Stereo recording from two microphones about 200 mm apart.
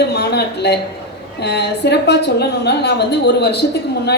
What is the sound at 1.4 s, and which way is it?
A woman's voice, 55° left (ahead or behind).